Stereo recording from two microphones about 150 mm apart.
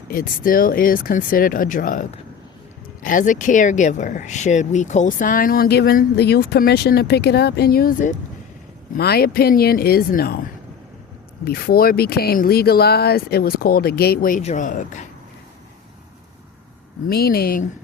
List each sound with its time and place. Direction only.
0.1 s speech: 70° left (ahead or behind)
9.0 s speech: 90° left
11.4 s speech: 90° left; by 14.4 s 70° left (ahead or behind)
14.4 s speech: 55° left (ahead or behind)
17.1 s speech: 90° left